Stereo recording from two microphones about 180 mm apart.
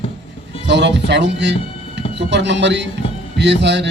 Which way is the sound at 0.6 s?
75° right (ahead or behind).